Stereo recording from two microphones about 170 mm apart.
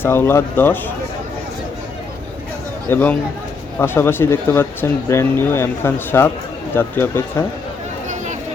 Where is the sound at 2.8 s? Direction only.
10° left (ahead or behind).